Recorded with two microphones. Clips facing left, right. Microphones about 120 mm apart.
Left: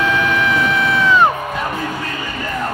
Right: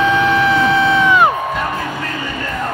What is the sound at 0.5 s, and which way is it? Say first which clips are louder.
Music: right 4 dB; 25° right (ahead or behind).